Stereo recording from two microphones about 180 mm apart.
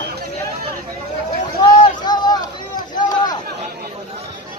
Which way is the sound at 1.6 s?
25° left (ahead or behind).